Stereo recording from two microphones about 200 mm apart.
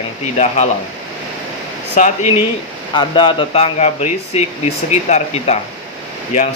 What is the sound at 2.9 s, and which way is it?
Speech, 25° left (ahead or behind).